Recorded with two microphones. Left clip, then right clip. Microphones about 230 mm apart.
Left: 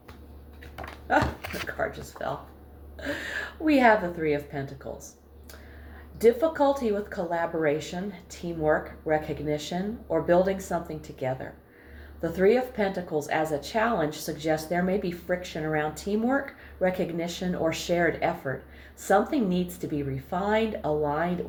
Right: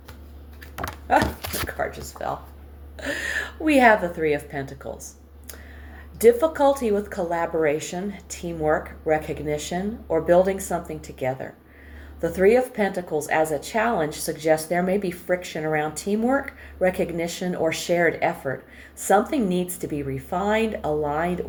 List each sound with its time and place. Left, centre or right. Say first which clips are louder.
0.8 s a sound: right 4 dB; right
3.1 s a woman's voice: right 5 dB; right
6.2 s a woman's voice: right 5 dB; right